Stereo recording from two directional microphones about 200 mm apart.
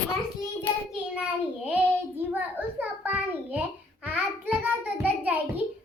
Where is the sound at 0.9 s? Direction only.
5° right (ahead or behind).